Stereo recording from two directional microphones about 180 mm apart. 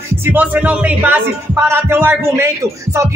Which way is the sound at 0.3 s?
10° right (ahead or behind).